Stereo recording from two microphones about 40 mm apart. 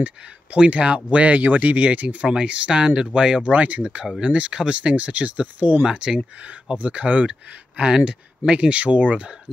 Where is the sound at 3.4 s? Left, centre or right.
Right.